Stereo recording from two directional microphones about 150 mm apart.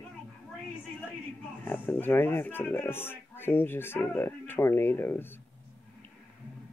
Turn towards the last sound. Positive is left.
turn(degrees=15)  # may be behind; listen again after turning